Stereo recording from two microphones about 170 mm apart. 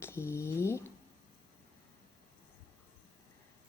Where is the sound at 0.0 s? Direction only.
15° left (ahead or behind).